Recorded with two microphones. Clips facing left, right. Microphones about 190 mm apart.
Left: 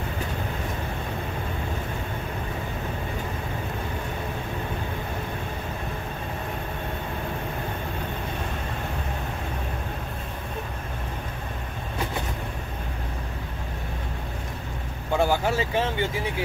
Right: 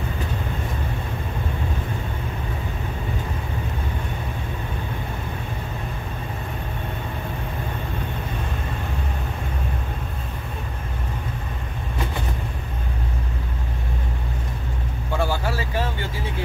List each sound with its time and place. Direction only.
15.1 s vehicle: 20° left (ahead or behind)